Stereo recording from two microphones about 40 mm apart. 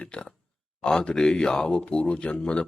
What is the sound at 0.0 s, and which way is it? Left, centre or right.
Speech, left.